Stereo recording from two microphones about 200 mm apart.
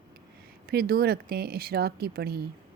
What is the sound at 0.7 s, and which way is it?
A woman's voice, 50° right (ahead or behind).